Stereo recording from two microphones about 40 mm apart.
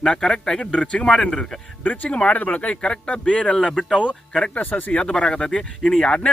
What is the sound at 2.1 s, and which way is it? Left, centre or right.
Speech, left.